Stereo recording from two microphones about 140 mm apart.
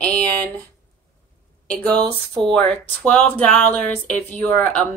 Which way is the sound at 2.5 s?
10° left (ahead or behind).